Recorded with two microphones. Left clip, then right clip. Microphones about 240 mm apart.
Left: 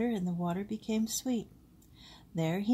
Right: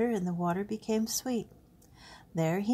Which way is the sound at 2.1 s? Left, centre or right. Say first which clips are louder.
Right 3 dB; right.